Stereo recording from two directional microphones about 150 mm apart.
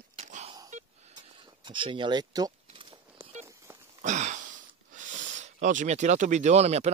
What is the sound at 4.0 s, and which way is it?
Speech, 55° right (ahead or behind).